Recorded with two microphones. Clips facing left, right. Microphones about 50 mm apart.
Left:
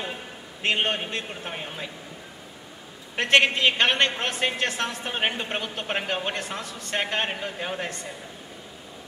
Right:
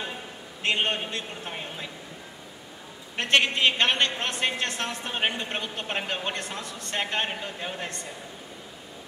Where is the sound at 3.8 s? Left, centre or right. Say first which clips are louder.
Left 2 dB; centre.